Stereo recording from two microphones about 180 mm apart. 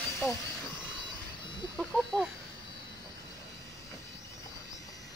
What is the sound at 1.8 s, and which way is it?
Speech, centre (ahead or behind).